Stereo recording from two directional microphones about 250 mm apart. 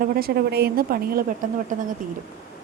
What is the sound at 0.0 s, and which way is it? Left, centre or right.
Speech, right.